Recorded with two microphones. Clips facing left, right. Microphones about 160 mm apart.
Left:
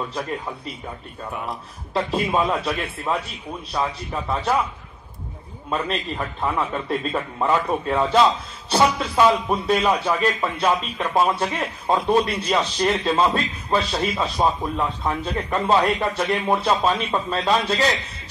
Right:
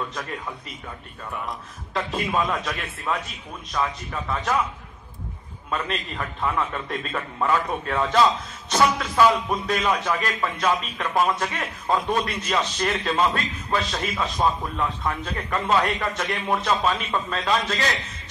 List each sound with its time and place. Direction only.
0.1 s a man's voice: 30° left (ahead or behind)
5.7 s a man's voice: 30° left (ahead or behind)